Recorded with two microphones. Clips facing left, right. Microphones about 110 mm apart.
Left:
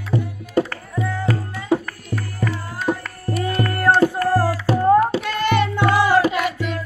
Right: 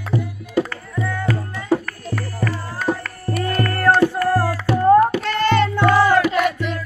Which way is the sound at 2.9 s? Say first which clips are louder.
Even; 15° left (ahead or behind).